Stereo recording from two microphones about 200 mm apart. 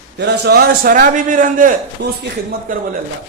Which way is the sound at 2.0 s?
60° right (ahead or behind).